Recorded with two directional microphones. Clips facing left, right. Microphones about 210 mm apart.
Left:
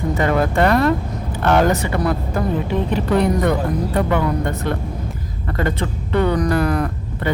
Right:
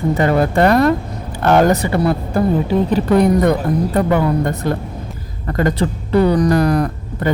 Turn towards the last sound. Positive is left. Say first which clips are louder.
# right 3 dB
turn(degrees=-40)  # may be behind; listen again after turning